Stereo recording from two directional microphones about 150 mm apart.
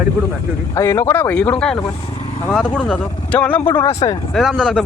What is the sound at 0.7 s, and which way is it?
Speech, 20° left (ahead or behind).